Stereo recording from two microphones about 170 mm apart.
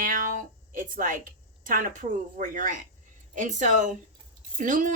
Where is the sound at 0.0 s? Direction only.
55° right (ahead or behind).